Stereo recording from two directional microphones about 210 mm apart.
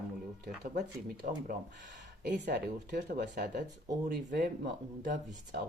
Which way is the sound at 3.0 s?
40° right (ahead or behind).